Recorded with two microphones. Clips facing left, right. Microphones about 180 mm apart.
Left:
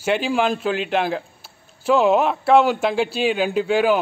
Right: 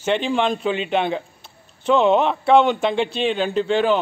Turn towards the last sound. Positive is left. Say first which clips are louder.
# left 1 dB
turn(degrees=10)  # may be behind; listen again after turning